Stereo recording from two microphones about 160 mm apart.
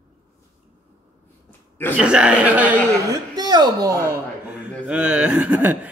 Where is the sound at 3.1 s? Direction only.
25° right (ahead or behind).